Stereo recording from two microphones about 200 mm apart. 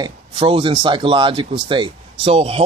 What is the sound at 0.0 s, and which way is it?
Speech, 25° right (ahead or behind).